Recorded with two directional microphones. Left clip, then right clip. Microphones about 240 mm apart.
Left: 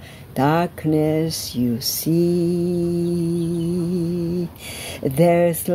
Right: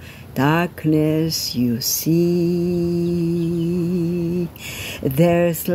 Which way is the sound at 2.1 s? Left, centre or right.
Right.